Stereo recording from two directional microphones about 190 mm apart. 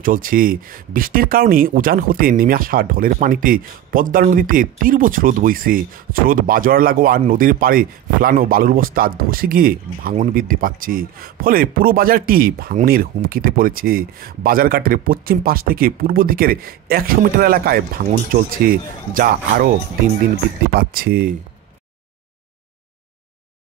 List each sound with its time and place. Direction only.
0.0 s speech: 45° right (ahead or behind)
20.7 s speech: 50° right (ahead or behind)